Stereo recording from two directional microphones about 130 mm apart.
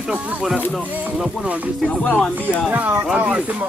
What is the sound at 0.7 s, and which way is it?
Speech, 10° right (ahead or behind).